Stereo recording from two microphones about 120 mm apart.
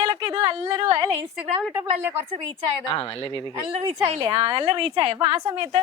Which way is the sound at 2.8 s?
45° left (ahead or behind).